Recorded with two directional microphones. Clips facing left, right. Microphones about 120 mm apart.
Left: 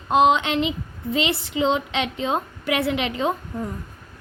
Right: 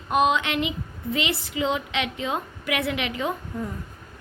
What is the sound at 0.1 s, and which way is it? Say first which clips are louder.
A woman's voice: left 4 dB; 25° left (ahead or behind).